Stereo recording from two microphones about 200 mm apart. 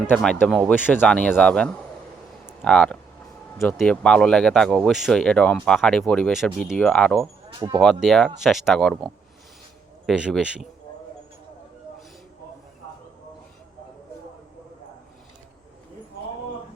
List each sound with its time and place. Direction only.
0.1 s speech: 5° left (ahead or behind)
7.6 s speech: 20° right (ahead or behind)
8.0 s speech: centre (ahead or behind)